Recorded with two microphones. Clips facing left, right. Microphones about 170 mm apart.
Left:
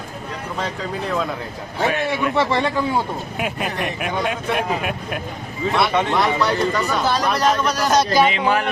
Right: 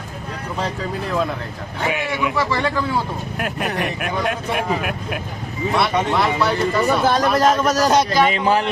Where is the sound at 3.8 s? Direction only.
Centre (ahead or behind).